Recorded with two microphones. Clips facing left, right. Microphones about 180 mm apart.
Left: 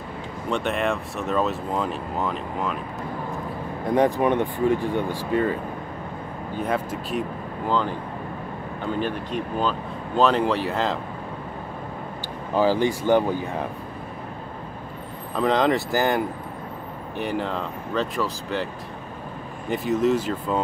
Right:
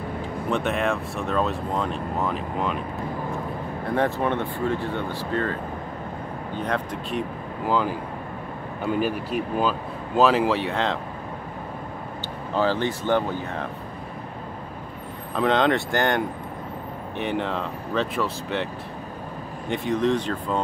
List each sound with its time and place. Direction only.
0.5 s speech: centre (ahead or behind)
3.8 s speech: 15° left (ahead or behind)
12.5 s speech: 10° left (ahead or behind)
15.3 s speech: centre (ahead or behind)
19.7 s speech: 5° left (ahead or behind)